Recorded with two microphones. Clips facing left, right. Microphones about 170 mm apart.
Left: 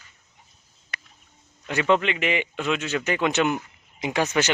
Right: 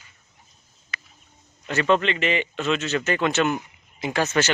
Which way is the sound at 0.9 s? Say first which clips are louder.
Right 1 dB; 65° left (ahead or behind).